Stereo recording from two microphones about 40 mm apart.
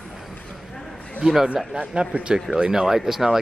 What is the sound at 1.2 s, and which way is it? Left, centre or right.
Speech, centre.